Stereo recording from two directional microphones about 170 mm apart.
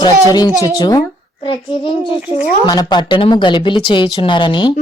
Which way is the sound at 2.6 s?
25° left (ahead or behind).